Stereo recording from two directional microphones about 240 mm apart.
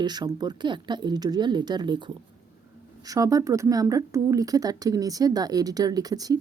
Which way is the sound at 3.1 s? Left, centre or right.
Centre.